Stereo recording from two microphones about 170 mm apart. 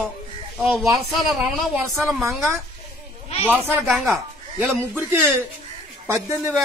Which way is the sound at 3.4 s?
Centre (ahead or behind).